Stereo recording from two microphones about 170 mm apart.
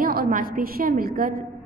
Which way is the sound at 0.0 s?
60° right (ahead or behind).